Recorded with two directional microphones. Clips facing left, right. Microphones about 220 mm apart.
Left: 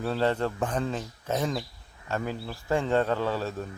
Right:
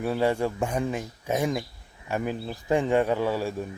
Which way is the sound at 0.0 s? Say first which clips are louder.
Right 2 dB; 10° right (ahead or behind).